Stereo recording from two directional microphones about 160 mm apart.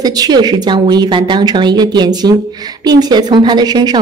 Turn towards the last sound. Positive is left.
turn(degrees=-25)  # may be behind; listen again after turning